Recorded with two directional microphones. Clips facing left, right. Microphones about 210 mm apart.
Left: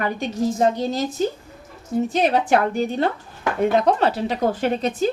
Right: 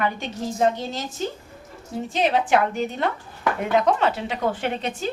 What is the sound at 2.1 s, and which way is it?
Speech, 45° left (ahead or behind).